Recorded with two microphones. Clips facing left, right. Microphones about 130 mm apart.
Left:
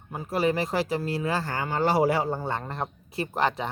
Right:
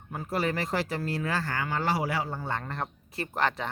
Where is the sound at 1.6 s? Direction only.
30° left (ahead or behind).